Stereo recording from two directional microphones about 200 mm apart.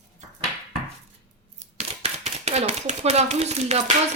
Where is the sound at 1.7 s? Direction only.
30° right (ahead or behind).